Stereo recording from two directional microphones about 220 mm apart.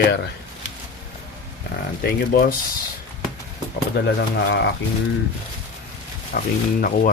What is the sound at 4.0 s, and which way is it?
Speech, 45° left (ahead or behind).